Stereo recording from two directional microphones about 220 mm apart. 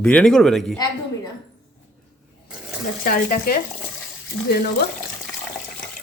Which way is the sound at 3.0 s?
40° left (ahead or behind).